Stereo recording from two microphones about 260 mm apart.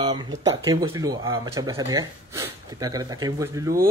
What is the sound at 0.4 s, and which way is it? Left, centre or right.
Speech, centre.